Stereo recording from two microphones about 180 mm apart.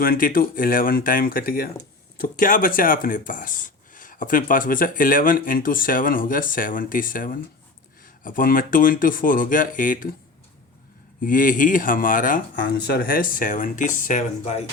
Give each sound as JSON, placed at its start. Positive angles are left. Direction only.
{"t": 0.0, "sound": "speech", "side_deg": 50}
{"t": 11.2, "sound": "speech", "side_deg": 50}